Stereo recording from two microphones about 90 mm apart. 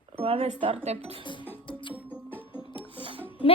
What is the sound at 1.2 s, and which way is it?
Music, 65° left (ahead or behind).